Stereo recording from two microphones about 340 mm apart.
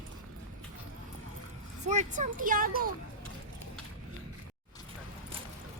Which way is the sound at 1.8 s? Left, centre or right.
Right.